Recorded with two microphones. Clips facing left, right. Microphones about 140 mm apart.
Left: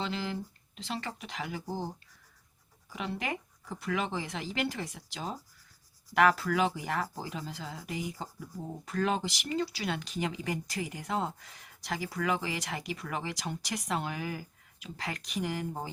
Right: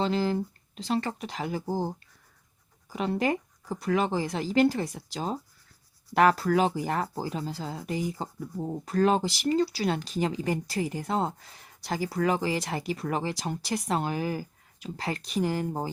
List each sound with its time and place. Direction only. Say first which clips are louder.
0.0 s speech: right 8 dB; 40° right (ahead or behind)
2.9 s speech: right 8 dB; 40° right (ahead or behind)